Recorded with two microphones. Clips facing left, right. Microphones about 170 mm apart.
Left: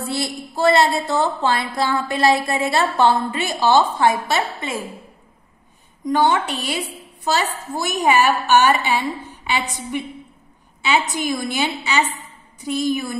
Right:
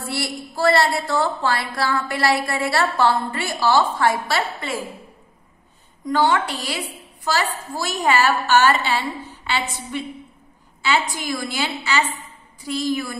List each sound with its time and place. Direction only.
0.0 s a woman's voice: 20° left (ahead or behind)
6.0 s a woman's voice: 20° left (ahead or behind)